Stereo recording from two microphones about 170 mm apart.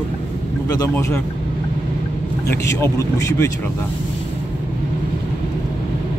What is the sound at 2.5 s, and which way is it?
Speech, 15° left (ahead or behind).